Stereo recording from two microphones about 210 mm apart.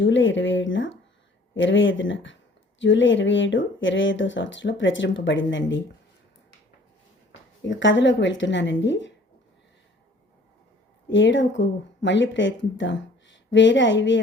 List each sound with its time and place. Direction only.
0.0 s speech: 60° left (ahead or behind)
7.8 s speech: 60° left (ahead or behind)
11.1 s speech: 60° left (ahead or behind)